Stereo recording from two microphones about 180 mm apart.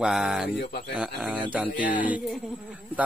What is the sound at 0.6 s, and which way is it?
Speech, 55° left (ahead or behind).